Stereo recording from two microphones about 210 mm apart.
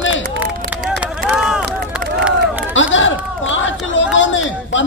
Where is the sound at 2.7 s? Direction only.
65° left (ahead or behind).